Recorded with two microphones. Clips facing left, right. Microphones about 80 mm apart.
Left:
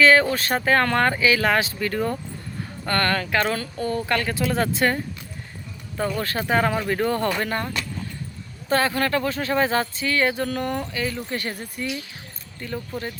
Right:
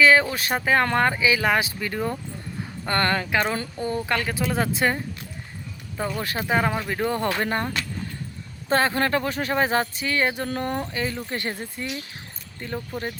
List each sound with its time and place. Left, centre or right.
0.0 s speech: centre
2.8 s speech: right
6.0 s speech: centre
7.4 s speech: right
8.7 s speech: right
10.6 s speech: right